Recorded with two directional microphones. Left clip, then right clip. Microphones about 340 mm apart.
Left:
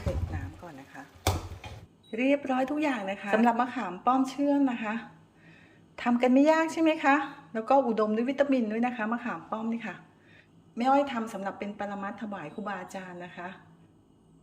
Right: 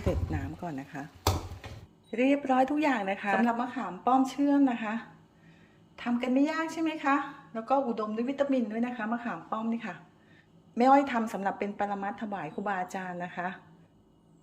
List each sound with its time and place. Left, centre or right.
0.3 s a sound: right
2.0 s speech: centre
3.4 s speech: centre
6.0 s a woman's voice: centre